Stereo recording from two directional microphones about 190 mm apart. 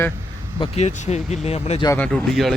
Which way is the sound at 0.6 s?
35° left (ahead or behind).